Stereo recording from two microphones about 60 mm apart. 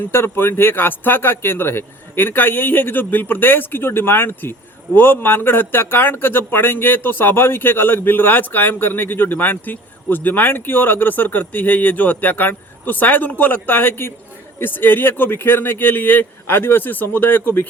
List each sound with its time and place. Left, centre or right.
0.1 s speech: left